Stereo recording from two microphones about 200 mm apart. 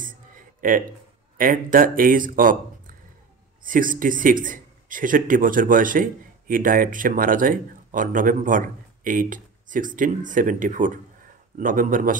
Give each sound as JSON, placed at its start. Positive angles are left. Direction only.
{"t": 0.0, "sound": "a sound", "side_deg": -40}
{"t": 1.4, "sound": "a man's voice", "side_deg": -45}
{"t": 3.6, "sound": "a man's voice", "side_deg": -45}